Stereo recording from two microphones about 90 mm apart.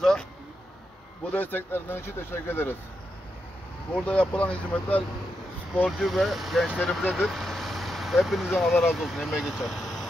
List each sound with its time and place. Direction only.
1.3 s speech: 20° left (ahead or behind)
3.9 s speech: 15° left (ahead or behind)
5.9 s speech: centre (ahead or behind)